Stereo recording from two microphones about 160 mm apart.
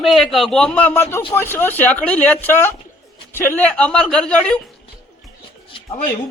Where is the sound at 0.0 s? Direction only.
Centre (ahead or behind).